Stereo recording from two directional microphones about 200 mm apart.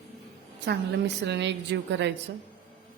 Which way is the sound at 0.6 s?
60° right (ahead or behind).